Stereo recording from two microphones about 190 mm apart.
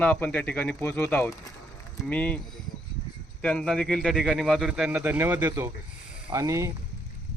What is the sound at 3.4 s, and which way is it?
Speech, 5° left (ahead or behind).